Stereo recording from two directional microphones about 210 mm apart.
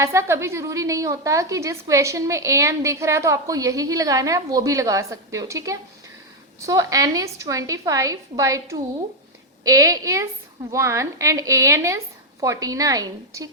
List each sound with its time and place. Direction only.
0.0 s a woman's voice: 15° right (ahead or behind)